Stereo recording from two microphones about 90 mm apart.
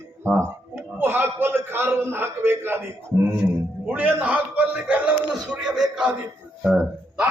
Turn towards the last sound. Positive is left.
turn(degrees=-10)  # may be behind; listen again after turning